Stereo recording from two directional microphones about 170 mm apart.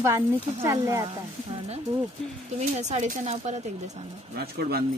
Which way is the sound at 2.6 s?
40° right (ahead or behind).